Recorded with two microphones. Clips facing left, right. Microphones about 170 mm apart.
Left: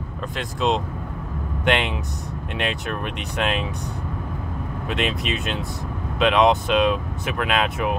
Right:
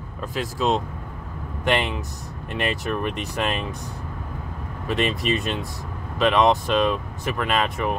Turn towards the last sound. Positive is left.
turn(degrees=0)  # may be behind; listen again after turning